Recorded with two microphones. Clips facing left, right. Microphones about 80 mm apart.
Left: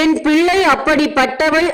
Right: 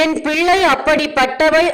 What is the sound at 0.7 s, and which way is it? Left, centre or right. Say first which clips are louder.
Speech: left 1 dB; left.